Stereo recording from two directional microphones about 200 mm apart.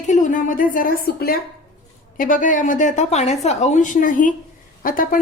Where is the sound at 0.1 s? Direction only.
40° left (ahead or behind).